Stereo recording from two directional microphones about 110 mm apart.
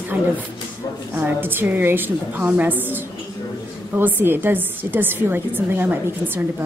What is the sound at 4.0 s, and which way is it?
A woman's voice, 20° right (ahead or behind).